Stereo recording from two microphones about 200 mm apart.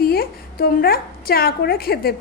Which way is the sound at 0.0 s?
50° left (ahead or behind).